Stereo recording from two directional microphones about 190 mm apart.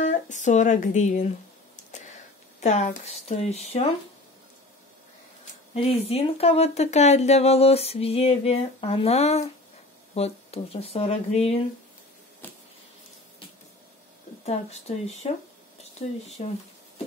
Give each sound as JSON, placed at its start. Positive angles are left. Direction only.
{"t": 0.0, "sound": "speech", "side_deg": 40}
{"t": 1.9, "sound": "a sound", "side_deg": 40}
{"t": 2.6, "sound": "speech", "side_deg": 35}
{"t": 5.4, "sound": "speech", "side_deg": 30}
{"t": 14.4, "sound": "speech", "side_deg": 35}